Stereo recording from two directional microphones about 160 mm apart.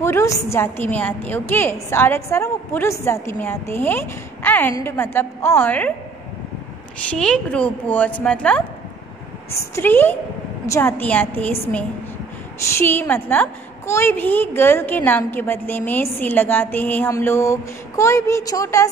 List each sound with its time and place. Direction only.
0.0 s a woman's voice: 15° left (ahead or behind)
7.1 s a woman's voice: 5° left (ahead or behind)